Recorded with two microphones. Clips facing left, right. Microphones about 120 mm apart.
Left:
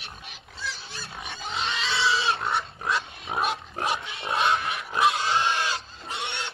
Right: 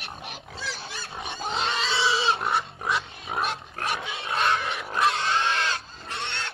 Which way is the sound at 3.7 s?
25° left (ahead or behind).